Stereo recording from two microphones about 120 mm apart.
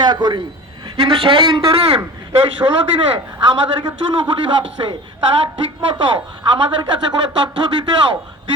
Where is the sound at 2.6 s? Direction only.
30° right (ahead or behind).